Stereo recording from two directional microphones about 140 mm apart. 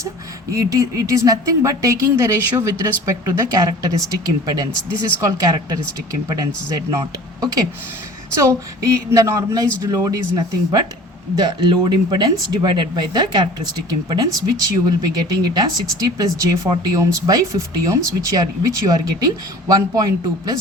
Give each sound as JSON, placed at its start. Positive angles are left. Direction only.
{"t": 0.5, "sound": "speech", "side_deg": -25}
{"t": 8.4, "sound": "speech", "side_deg": -20}